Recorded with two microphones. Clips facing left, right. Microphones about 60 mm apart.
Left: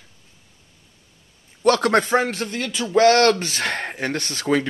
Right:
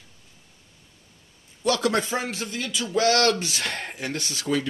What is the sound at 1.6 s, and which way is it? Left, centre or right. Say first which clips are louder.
Speech: left 6 dB; left.